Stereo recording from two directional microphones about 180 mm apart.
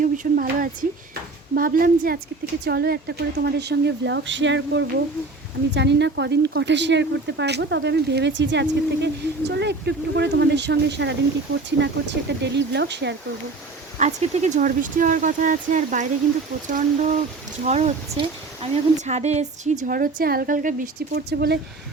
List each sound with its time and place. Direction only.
0.0 s a woman's voice: 50° right (ahead or behind); by 4.9 s 90° right
5.7 s a woman's voice: 75° right (ahead or behind)
14.0 s speech: 40° right (ahead or behind)
19.9 s speech: 50° right (ahead or behind)